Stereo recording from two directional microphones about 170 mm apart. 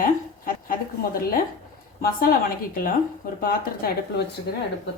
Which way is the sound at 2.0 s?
60° left (ahead or behind).